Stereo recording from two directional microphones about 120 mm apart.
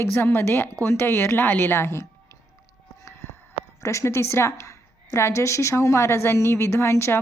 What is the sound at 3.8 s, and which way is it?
A woman's voice, 25° left (ahead or behind).